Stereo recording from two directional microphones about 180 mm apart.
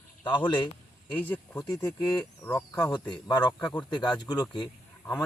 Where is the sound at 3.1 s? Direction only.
25° left (ahead or behind).